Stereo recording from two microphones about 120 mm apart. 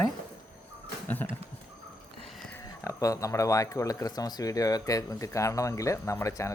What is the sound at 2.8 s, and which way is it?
Speech, 25° left (ahead or behind).